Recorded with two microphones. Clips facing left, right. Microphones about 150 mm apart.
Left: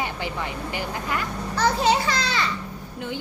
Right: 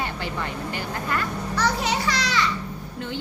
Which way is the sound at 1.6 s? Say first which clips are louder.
Left 4 dB; 30° left (ahead or behind).